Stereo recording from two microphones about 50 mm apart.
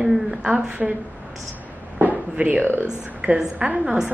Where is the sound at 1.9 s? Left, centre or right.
Right.